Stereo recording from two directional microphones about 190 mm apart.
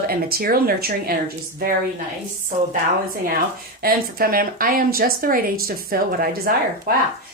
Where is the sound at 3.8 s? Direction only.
50° right (ahead or behind).